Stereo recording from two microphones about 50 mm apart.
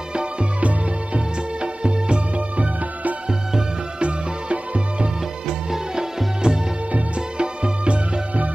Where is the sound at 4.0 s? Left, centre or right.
Right.